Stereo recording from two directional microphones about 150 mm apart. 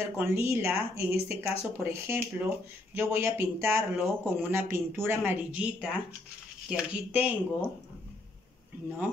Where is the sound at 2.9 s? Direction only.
15° right (ahead or behind).